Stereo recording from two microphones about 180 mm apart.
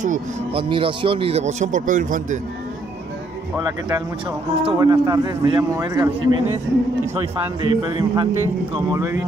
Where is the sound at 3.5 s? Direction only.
20° right (ahead or behind).